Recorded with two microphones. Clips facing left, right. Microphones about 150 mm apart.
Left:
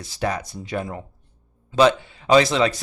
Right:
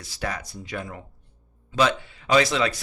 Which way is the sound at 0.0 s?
25° left (ahead or behind).